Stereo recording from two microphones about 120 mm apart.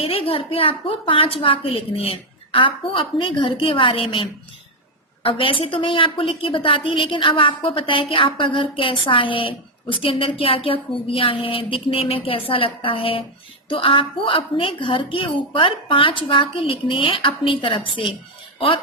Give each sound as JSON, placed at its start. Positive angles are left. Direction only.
{"t": 0.0, "sound": "a woman's voice", "side_deg": 50}